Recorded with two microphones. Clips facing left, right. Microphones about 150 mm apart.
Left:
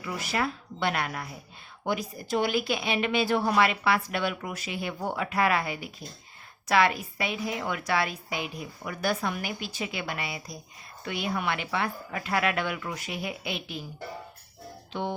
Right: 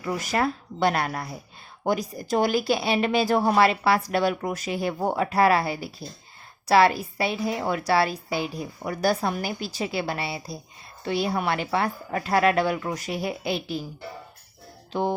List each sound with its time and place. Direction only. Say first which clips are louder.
0.0 s speech: right 5 dB; 45° right (ahead or behind)